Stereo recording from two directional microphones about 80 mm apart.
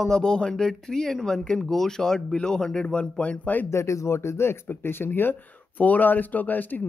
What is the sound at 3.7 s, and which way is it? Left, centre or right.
Speech, left.